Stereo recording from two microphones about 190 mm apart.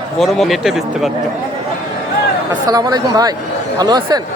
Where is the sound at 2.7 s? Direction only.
20° right (ahead or behind).